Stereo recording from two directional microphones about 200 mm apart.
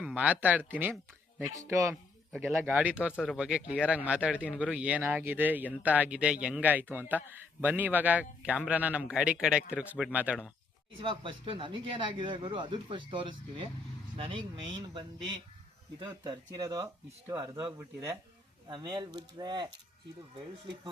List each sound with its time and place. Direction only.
0.0 s speech: 5° right (ahead or behind)
11.0 s speech: 25° right (ahead or behind)